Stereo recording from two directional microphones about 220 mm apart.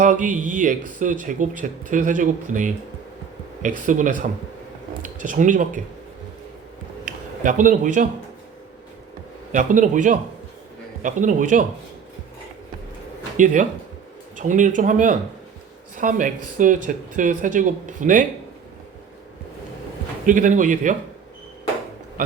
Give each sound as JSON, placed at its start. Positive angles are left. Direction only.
{"t": 0.0, "sound": "speech", "side_deg": -35}
{"t": 7.4, "sound": "speech", "side_deg": -35}
{"t": 9.5, "sound": "speech", "side_deg": -35}
{"t": 13.3, "sound": "speech", "side_deg": -35}
{"t": 20.2, "sound": "speech", "side_deg": -35}